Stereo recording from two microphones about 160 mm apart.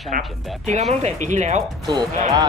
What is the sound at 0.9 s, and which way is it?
Speech, 45° right (ahead or behind).